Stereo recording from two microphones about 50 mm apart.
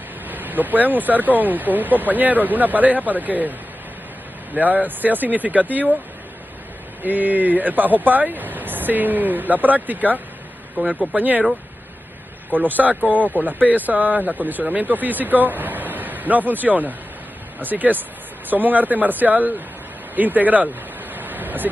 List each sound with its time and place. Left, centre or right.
0.3 s speech: right
4.6 s speech: right
7.0 s speech: right
12.4 s speech: right
20.2 s a sound: right